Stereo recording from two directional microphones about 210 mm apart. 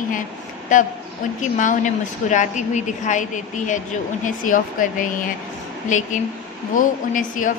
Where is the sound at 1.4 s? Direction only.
35° left (ahead or behind).